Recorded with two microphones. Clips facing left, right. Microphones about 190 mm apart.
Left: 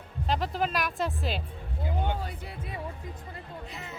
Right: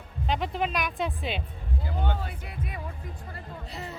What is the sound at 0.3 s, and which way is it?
Speech, centre (ahead or behind).